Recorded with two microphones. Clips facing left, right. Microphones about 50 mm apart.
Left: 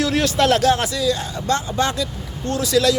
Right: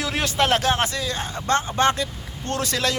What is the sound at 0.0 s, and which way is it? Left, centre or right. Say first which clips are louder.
Speech: left 5 dB; centre.